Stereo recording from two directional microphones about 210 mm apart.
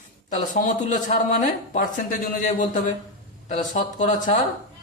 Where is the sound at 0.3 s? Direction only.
40° left (ahead or behind).